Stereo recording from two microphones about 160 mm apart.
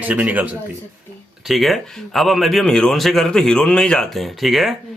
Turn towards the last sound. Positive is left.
turn(degrees=0)  # may be behind; listen again after turning